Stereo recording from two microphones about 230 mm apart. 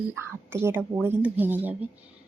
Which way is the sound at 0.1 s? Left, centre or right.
Centre.